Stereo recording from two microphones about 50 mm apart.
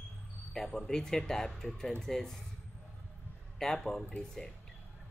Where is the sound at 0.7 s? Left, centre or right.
Centre.